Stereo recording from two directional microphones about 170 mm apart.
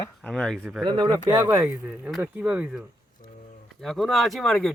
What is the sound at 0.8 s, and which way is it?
Speech, 30° right (ahead or behind).